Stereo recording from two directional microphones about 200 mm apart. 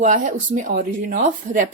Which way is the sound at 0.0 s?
40° right (ahead or behind).